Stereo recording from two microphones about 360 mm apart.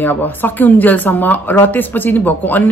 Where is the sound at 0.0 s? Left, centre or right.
Centre.